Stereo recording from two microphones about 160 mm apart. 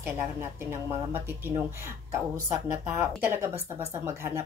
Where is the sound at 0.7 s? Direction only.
15° right (ahead or behind).